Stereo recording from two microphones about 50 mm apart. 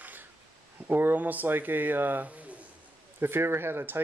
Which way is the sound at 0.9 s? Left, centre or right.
Right.